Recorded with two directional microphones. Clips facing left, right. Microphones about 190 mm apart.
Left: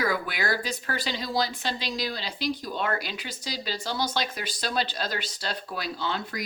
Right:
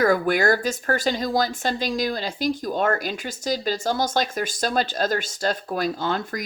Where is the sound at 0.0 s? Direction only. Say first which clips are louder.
Right 9 dB; 45° right (ahead or behind).